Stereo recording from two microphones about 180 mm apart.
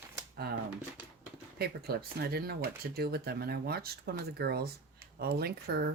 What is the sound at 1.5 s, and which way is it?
Speech, 60° right (ahead or behind).